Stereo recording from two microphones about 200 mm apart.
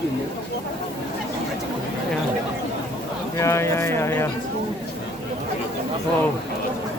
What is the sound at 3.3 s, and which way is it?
Speech, 15° left (ahead or behind).